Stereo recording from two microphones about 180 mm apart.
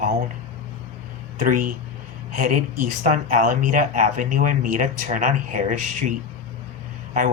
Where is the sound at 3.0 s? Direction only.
45° right (ahead or behind).